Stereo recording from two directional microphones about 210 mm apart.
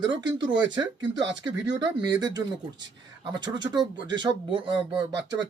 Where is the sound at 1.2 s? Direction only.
60° right (ahead or behind).